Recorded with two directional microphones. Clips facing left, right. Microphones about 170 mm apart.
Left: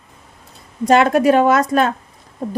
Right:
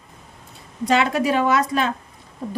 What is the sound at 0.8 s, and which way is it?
A woman's voice, 50° left (ahead or behind).